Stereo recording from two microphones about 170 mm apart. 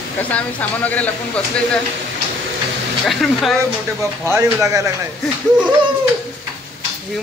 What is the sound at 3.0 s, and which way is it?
Speech, centre (ahead or behind).